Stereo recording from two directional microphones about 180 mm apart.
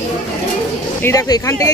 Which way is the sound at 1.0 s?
20° left (ahead or behind).